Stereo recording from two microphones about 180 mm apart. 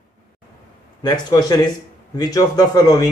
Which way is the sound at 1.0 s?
20° left (ahead or behind).